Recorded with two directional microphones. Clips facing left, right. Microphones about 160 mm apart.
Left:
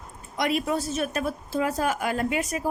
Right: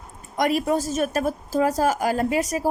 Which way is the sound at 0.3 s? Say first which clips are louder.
Right 4 dB; 45° right (ahead or behind).